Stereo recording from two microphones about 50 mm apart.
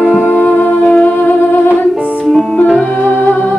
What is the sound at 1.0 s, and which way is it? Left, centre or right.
Music, left.